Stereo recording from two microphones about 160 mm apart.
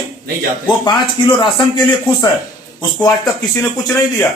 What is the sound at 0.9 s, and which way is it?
Speech, 30° left (ahead or behind).